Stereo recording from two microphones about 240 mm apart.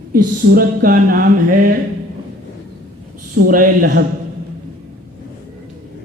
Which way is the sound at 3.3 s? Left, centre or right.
Right.